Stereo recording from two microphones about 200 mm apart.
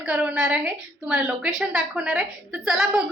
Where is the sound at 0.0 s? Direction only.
5° right (ahead or behind).